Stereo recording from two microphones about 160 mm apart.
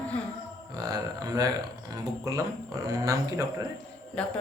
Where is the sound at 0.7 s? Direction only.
25° right (ahead or behind).